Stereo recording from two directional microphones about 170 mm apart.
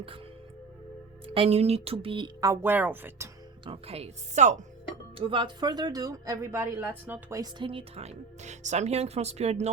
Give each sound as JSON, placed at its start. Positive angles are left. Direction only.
{"t": 1.3, "sound": "speech", "side_deg": -35}
{"t": 3.7, "sound": "a woman's voice", "side_deg": -35}
{"t": 5.1, "sound": "speech", "side_deg": -30}